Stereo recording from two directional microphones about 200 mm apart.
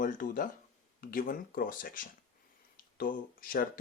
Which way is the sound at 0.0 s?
40° left (ahead or behind).